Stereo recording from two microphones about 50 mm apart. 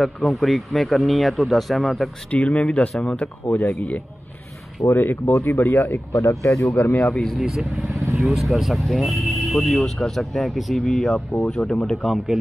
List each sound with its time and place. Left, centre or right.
0.0 s speech: centre
2.3 s speech: left
3.4 s speech: left
4.9 s speech: left
6.1 s speech: left
6.7 s speech: left
7.3 s speech: centre
7.9 s vehicle: right
8.3 s speech: centre